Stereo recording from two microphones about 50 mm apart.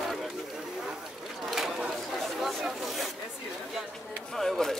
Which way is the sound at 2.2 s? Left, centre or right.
Centre.